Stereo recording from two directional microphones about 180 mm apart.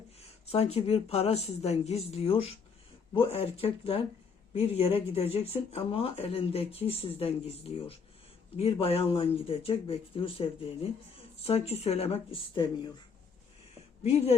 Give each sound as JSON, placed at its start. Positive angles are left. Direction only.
{"t": 0.2, "sound": "speech", "side_deg": 35}